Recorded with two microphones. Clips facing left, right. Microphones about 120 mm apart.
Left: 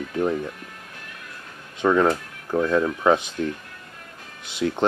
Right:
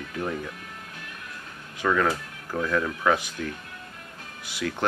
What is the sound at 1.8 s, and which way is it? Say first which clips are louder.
Speech: left 5 dB; 25° left (ahead or behind).